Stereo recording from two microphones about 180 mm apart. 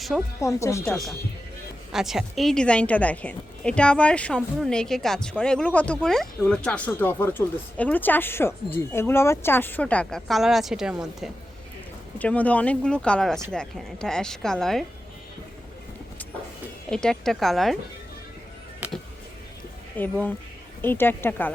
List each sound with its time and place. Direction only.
0.1 s a woman's voice: centre (ahead or behind)
0.4 s a woman's voice: 15° left (ahead or behind)
0.9 s a woman's voice: centre (ahead or behind)
12.2 s a woman's voice: 10° left (ahead or behind)
16.9 s a woman's voice: 5° left (ahead or behind)
20.0 s a woman's voice: 10° left (ahead or behind)